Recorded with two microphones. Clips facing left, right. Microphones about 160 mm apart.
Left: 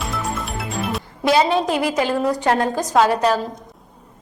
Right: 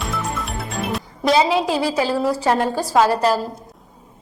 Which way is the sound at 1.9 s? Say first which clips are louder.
Even; 5° right (ahead or behind).